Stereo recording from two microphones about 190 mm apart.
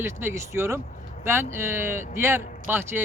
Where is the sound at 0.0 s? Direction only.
15° right (ahead or behind).